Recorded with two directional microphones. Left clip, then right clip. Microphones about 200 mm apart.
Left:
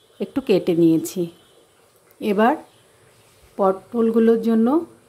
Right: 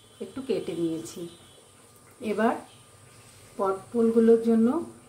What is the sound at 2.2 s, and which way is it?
Speech, 55° left (ahead or behind).